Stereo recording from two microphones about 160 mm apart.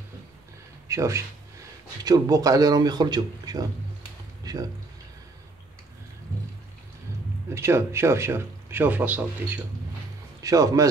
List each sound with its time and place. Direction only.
0.8 s speech: 20° right (ahead or behind)
7.5 s speech: 15° right (ahead or behind)
10.4 s speech: 20° right (ahead or behind)